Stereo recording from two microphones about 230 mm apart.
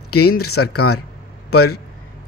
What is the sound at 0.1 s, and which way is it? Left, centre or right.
Speech, left.